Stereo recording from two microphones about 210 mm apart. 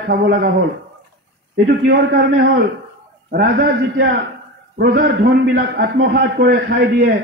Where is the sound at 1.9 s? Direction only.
45° right (ahead or behind).